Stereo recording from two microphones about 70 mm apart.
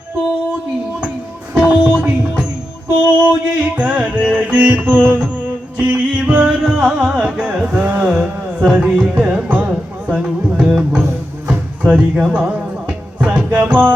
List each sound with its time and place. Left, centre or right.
1.5 s music: centre
9.1 s music: right